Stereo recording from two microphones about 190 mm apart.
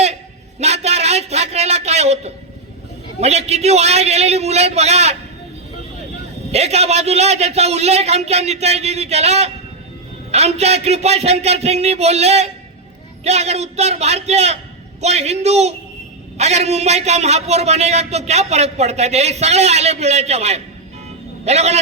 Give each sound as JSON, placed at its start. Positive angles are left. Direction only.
{"t": 0.6, "sound": "a sound", "side_deg": -35}
{"t": 3.2, "sound": "a man's voice", "side_deg": -35}
{"t": 6.5, "sound": "a man's voice", "side_deg": -35}